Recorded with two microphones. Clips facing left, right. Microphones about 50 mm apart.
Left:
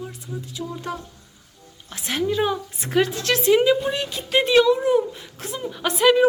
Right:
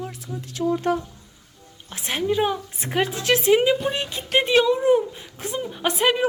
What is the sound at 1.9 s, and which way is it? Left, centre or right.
Speech, centre.